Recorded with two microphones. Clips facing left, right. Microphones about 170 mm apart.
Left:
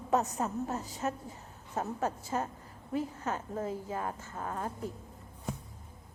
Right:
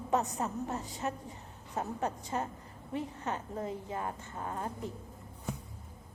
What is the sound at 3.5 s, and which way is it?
Speech, 20° right (ahead or behind).